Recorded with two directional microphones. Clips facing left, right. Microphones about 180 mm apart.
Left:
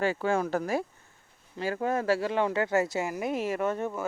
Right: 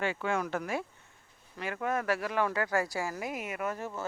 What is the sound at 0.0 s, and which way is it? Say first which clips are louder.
Speech: left 5 dB; 35° left (ahead or behind).